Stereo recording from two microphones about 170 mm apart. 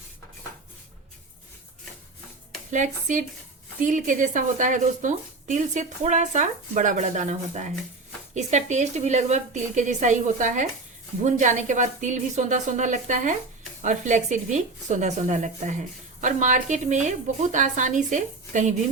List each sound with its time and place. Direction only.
2.7 s speech: 45° right (ahead or behind)